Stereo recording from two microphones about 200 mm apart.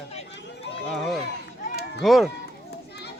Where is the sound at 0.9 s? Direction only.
5° left (ahead or behind).